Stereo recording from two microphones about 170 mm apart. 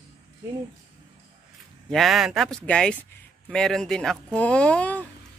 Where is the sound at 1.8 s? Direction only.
Centre (ahead or behind).